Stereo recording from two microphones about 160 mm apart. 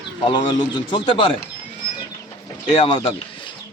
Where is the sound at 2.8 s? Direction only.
35° left (ahead or behind).